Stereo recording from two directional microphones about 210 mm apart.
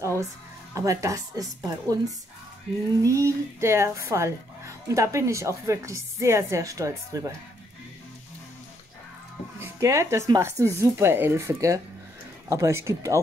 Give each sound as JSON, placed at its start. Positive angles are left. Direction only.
{"t": 0.7, "sound": "speech", "side_deg": -15}
{"t": 9.6, "sound": "speech", "side_deg": -15}